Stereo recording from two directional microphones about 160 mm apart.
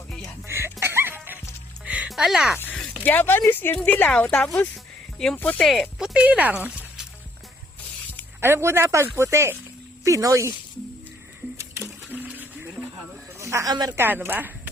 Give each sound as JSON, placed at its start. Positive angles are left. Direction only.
{"t": 0.4, "sound": "music", "side_deg": -15}
{"t": 2.6, "sound": "a sound", "side_deg": 10}
{"t": 3.0, "sound": "speech", "side_deg": 10}
{"t": 8.4, "sound": "speech", "side_deg": -15}
{"t": 11.5, "sound": "a sound", "side_deg": -15}
{"t": 13.4, "sound": "a woman's voice", "side_deg": -20}